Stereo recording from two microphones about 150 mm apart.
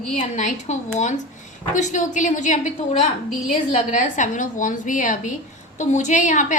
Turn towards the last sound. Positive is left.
turn(degrees=55)  # may be behind; listen again after turning